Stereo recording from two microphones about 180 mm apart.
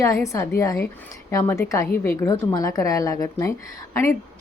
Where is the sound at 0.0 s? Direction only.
15° left (ahead or behind).